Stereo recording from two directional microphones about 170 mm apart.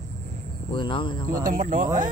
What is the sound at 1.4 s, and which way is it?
Speech, 55° right (ahead or behind).